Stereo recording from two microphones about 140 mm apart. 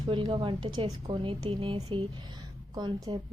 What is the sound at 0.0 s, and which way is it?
A woman's voice, 35° right (ahead or behind).